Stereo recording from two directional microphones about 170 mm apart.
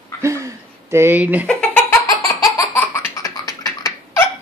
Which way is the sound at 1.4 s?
5° left (ahead or behind).